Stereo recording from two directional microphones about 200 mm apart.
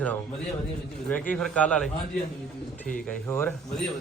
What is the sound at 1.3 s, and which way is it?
Speech, 5° left (ahead or behind).